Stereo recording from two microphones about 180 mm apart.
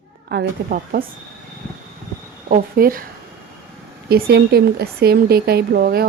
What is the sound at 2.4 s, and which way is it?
Speech, 50° right (ahead or behind).